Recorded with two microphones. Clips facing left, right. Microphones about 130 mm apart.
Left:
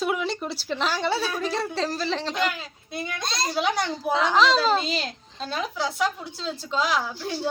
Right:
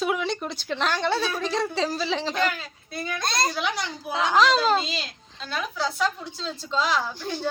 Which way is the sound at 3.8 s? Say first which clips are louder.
Left 6 dB; 55° left (ahead or behind).